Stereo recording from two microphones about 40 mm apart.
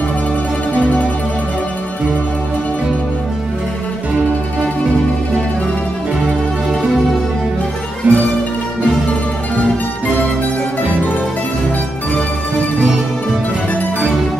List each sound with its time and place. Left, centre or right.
8.1 s music: right